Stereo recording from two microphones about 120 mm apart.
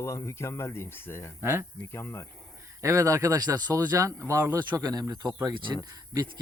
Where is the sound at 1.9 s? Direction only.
20° left (ahead or behind).